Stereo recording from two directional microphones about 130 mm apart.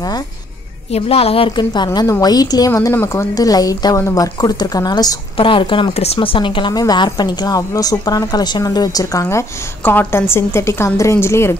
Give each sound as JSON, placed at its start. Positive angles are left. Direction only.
{"t": 0.9, "sound": "a woman's voice", "side_deg": 50}